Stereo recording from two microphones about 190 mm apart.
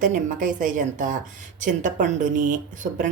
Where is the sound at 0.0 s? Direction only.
45° right (ahead or behind).